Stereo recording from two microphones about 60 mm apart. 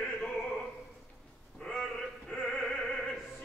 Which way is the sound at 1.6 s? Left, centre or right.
Centre.